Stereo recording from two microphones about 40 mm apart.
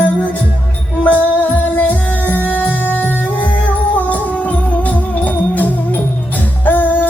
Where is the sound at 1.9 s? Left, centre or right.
Left.